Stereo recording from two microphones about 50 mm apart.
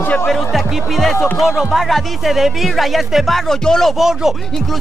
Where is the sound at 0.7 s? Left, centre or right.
Centre.